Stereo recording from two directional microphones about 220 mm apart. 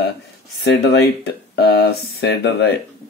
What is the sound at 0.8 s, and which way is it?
Speech, 50° left (ahead or behind).